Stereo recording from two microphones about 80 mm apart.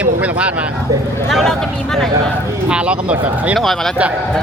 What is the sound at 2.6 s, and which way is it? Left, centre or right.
Speech, centre.